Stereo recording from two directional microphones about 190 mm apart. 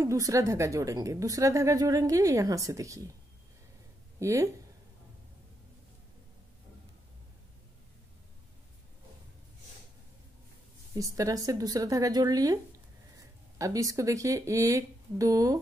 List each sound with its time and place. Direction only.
0.0 s speech: 15° right (ahead or behind)
4.2 s speech: 15° right (ahead or behind)
11.0 s speech: 20° right (ahead or behind)
13.6 s speech: 15° right (ahead or behind)